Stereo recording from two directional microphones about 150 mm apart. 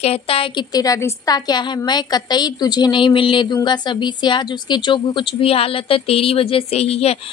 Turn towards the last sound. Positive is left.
turn(degrees=45)  # may be behind; listen again after turning